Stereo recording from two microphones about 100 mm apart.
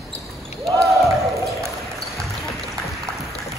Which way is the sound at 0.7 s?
Centre (ahead or behind).